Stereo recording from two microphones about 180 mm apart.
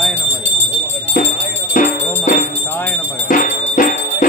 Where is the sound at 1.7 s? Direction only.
50° left (ahead or behind).